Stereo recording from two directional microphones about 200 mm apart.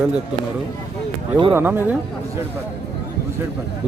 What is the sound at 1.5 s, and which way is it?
Speech, 10° right (ahead or behind).